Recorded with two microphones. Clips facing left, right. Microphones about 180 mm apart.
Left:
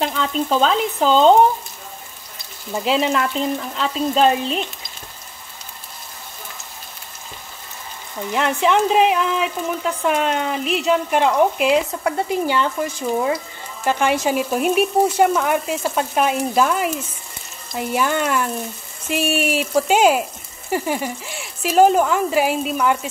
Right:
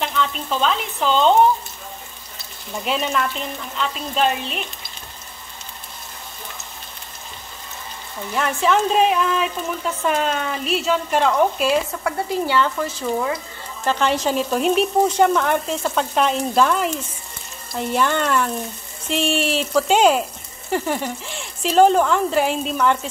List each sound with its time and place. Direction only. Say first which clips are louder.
0.0 s speech: left 3 dB; 40° left (ahead or behind)
2.8 s speech: left 4 dB; 25° left (ahead or behind)
3.3 s speech: left 5 dB; 35° left (ahead or behind)
8.3 s speech: left 2 dB; 20° left (ahead or behind)